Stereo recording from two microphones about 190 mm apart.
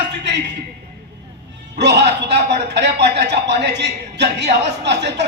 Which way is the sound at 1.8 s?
65° right (ahead or behind).